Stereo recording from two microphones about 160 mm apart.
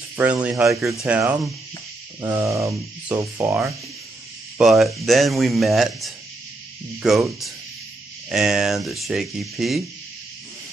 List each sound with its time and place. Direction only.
0.2 s speech: 10° right (ahead or behind)
2.2 s a sound: 20° right (ahead or behind)
3.2 s speech: 15° right (ahead or behind)
4.6 s speech: centre (ahead or behind)